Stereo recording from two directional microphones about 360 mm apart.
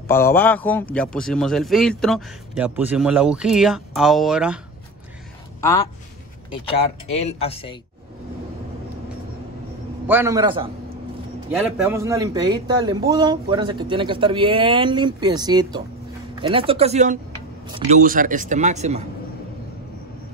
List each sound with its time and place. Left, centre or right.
0.1 s a man's voice: centre
7.2 s speech: centre
10.0 s a man's voice: centre
11.5 s a man's voice: centre